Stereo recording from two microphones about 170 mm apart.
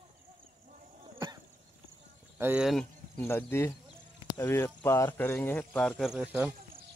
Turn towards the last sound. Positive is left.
turn(degrees=-10)  # may be behind; listen again after turning